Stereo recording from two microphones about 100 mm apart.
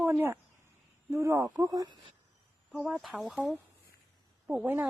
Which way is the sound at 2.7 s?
Centre (ahead or behind).